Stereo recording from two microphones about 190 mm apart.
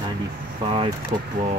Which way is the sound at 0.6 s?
30° right (ahead or behind).